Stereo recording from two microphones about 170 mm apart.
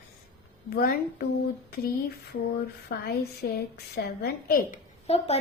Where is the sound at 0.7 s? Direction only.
65° left (ahead or behind).